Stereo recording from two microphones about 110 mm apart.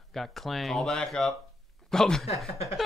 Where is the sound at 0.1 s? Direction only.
Centre (ahead or behind).